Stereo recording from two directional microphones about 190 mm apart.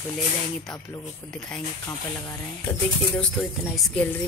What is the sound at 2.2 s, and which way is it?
Speech, 5° left (ahead or behind).